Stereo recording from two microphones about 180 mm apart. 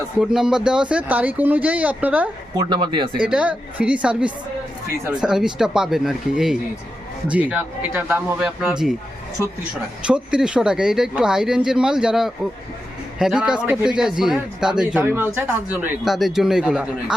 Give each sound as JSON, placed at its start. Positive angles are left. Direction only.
{"t": 0.2, "sound": "speech", "side_deg": -5}
{"t": 2.6, "sound": "speech", "side_deg": -25}
{"t": 3.2, "sound": "speech", "side_deg": -5}
{"t": 10.1, "sound": "speech", "side_deg": -5}
{"t": 16.0, "sound": "speech", "side_deg": 0}